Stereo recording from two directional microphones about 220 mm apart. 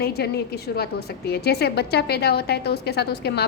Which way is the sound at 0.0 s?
45° left (ahead or behind).